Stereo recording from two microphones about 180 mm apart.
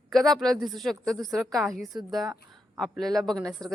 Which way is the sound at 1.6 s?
Centre (ahead or behind).